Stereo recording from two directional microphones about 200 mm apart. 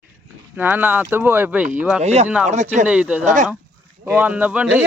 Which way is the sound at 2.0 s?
35° right (ahead or behind).